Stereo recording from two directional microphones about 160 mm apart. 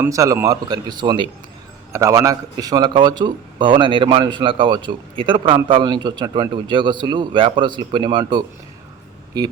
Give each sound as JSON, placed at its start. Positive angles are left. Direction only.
{"t": 0.0, "sound": "speech", "side_deg": -20}
{"t": 1.9, "sound": "speech", "side_deg": -20}